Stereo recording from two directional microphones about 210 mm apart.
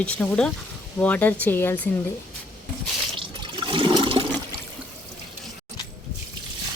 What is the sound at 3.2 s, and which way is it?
Toilet flush, 20° right (ahead or behind).